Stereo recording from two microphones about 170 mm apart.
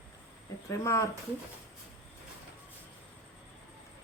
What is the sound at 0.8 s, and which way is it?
Speech, 15° left (ahead or behind).